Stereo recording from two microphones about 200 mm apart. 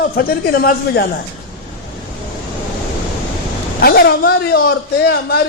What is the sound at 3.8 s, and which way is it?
A man's voice, 55° left (ahead or behind).